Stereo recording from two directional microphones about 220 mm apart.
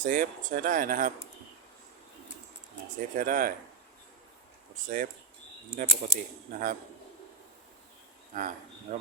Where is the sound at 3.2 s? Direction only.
40° right (ahead or behind).